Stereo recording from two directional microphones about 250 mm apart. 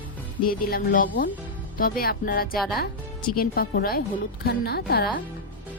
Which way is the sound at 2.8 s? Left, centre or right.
Left.